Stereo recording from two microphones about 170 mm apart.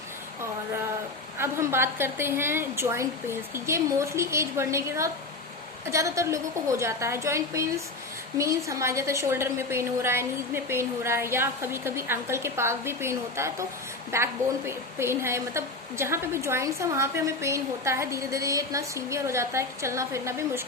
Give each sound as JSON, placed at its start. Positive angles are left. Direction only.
{"t": 1.4, "sound": "a woman's voice", "side_deg": -15}